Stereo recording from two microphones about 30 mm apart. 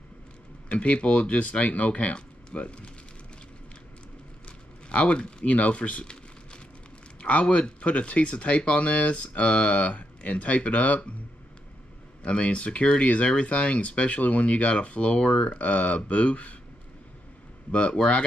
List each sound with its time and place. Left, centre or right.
0.7 s speech: left
4.5 s speech: left
7.2 s a sound: left
7.5 s speech: left
12.2 s speech: left
13.7 s speech: left
17.6 s speech: left